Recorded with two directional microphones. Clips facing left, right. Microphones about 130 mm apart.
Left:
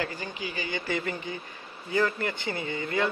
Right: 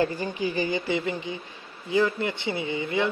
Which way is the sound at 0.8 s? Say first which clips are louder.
Right 4 dB; 20° right (ahead or behind).